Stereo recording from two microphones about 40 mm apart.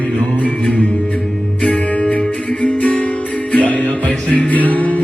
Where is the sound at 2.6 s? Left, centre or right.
Left.